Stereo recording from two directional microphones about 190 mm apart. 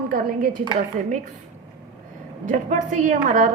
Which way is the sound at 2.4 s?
40° right (ahead or behind).